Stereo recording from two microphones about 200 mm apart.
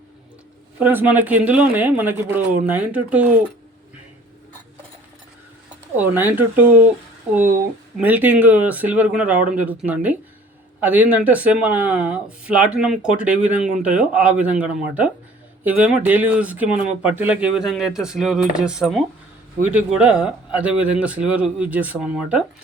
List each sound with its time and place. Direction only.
0.8 s speech: 10° right (ahead or behind)
6.0 s speech: 10° right (ahead or behind)
7.9 s speech: 10° right (ahead or behind)